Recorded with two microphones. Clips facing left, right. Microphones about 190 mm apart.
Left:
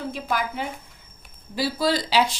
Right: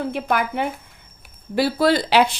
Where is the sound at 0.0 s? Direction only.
60° right (ahead or behind).